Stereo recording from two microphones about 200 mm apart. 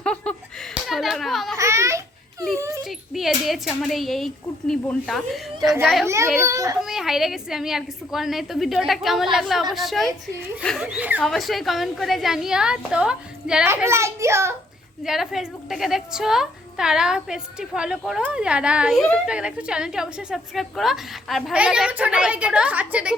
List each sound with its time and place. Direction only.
0.0 s laughter: 5° left (ahead or behind)
0.7 s a sound: centre (ahead or behind)
1.5 s a sound: 15° right (ahead or behind)
2.6 s dog: 15° right (ahead or behind)
2.8 s a woman's voice: centre (ahead or behind)
5.5 s a child's voice: 20° right (ahead or behind)
5.8 s a woman's voice: centre (ahead or behind)
6.4 s a child's voice: 15° right (ahead or behind)
6.8 s a woman's voice: centre (ahead or behind)
15.0 s a woman's voice: centre (ahead or behind)